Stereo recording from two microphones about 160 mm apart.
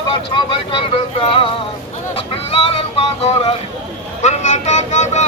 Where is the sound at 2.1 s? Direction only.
35° left (ahead or behind).